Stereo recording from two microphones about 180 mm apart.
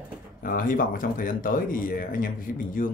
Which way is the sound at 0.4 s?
50° left (ahead or behind).